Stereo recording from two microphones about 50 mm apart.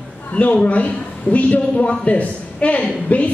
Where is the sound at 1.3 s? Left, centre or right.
Left.